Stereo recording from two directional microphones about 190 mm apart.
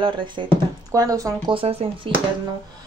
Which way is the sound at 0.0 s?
25° right (ahead or behind).